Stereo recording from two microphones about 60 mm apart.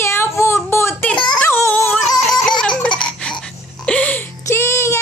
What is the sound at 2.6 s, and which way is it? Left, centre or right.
Baby laughter, centre.